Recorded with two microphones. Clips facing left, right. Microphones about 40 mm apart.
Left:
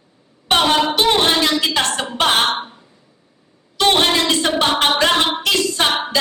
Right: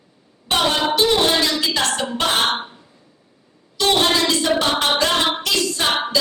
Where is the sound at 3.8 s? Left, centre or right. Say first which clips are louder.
Left 2 dB; left.